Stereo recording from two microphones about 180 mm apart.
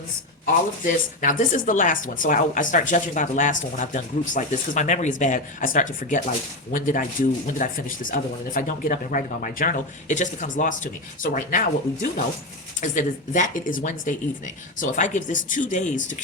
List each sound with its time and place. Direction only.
0.9 s speech: 45° left (ahead or behind)
12.8 s speech: 45° left (ahead or behind)